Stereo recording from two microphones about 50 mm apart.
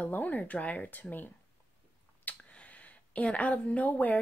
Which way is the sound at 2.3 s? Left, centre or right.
Left.